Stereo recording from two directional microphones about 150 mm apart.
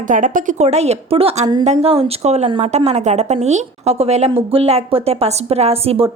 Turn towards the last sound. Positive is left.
turn(degrees=-40)  # may be behind; listen again after turning